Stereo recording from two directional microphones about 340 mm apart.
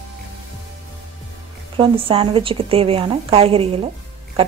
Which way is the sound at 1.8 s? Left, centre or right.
Centre.